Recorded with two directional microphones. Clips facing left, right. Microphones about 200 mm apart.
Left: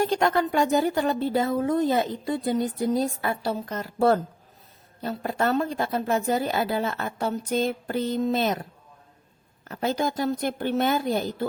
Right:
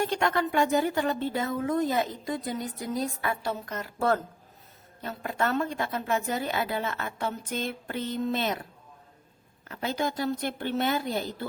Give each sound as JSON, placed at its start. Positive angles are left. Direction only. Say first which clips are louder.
{"t": 0.0, "sound": "a woman's voice", "louder": "left 4 dB", "side_deg": 35}
{"t": 9.6, "sound": "a woman's voice", "louder": "left 4 dB", "side_deg": 45}